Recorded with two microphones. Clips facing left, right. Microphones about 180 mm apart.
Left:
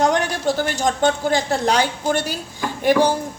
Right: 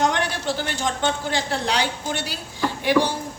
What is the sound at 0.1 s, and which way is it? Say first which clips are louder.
Speech: left 5 dB; 45° left (ahead or behind).